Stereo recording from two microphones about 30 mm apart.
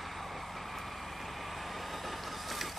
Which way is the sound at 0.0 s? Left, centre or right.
Centre.